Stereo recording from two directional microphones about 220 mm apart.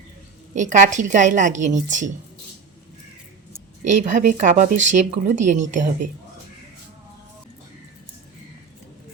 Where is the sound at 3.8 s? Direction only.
35° right (ahead or behind).